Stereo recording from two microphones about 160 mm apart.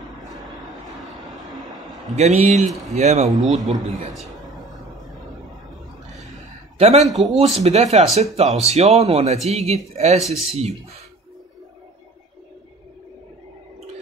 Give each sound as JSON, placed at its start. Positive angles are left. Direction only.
{"t": 0.7, "sound": "vehicle", "side_deg": 0}
{"t": 2.1, "sound": "a man's voice", "side_deg": -45}
{"t": 3.3, "sound": "a man's voice", "side_deg": 0}
{"t": 6.8, "sound": "a man's voice", "side_deg": -45}
{"t": 7.2, "sound": "a man's voice", "side_deg": 0}
{"t": 7.4, "sound": "a man's voice", "side_deg": -40}